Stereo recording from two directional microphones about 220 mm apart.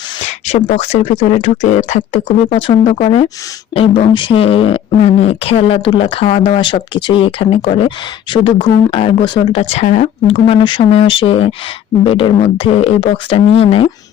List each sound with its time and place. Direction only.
0.4 s speech: 30° left (ahead or behind)